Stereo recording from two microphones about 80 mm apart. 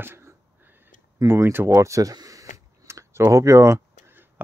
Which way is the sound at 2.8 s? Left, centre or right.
Right.